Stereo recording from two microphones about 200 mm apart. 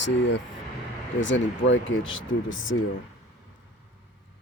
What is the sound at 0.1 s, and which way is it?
Speech, 65° left (ahead or behind).